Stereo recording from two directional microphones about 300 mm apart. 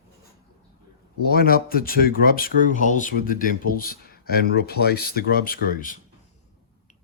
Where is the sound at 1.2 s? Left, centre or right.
Left.